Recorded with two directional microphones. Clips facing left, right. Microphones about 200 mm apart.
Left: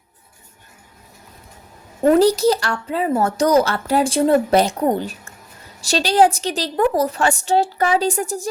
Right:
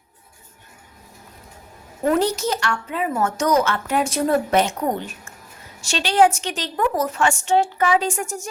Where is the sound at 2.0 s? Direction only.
35° left (ahead or behind).